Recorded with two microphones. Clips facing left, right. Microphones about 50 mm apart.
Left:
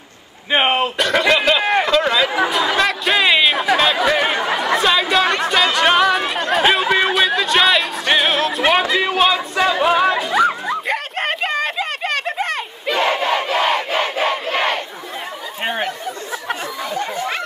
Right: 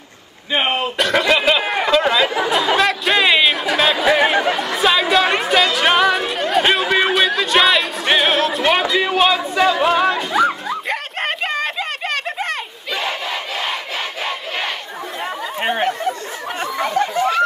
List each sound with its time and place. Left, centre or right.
0.5 s speech: centre
0.9 s a sound: centre
2.5 s chatter: centre
8.9 s music: centre
13.2 s battle cry: left
16.8 s a sound: right